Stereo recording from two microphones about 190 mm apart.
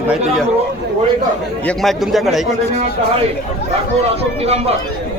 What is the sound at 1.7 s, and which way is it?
Speech, centre (ahead or behind).